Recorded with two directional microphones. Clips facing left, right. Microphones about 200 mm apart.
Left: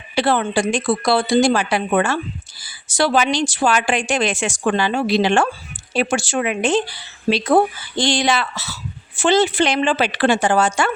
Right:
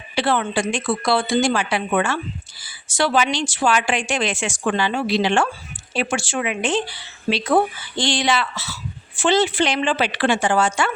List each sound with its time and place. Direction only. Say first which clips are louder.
0.2 s speech: left 3 dB; 35° left (ahead or behind)